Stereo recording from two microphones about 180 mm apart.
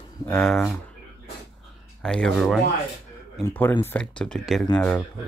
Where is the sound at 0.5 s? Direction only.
Centre (ahead or behind).